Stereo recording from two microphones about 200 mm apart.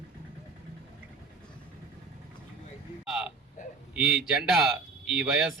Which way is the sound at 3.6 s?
40° left (ahead or behind).